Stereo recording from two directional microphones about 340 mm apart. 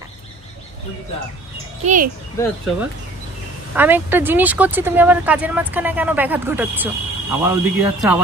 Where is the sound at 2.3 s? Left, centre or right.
Centre.